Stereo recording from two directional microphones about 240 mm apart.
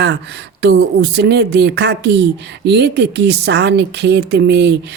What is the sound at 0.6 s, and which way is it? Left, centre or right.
Speech, right.